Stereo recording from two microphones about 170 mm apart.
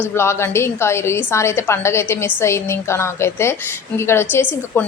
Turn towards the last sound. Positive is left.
turn(degrees=10)  # may be behind; listen again after turning